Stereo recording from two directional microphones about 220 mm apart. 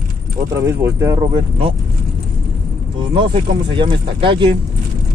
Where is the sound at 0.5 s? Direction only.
10° right (ahead or behind).